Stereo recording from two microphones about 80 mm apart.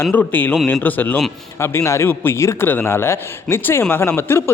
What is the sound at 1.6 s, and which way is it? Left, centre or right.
A man's voice, left.